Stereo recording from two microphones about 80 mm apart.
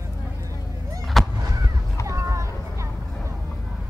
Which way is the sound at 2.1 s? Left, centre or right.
Right.